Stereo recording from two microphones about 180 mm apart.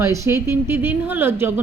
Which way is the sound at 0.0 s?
15° right (ahead or behind).